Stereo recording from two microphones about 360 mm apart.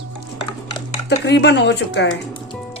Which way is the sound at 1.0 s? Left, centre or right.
Left.